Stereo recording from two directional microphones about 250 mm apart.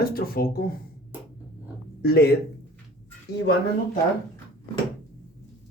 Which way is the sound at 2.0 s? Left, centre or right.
Left.